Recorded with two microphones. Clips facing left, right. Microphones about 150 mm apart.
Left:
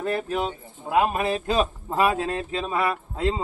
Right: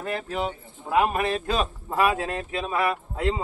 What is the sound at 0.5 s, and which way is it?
Speech, 20° left (ahead or behind).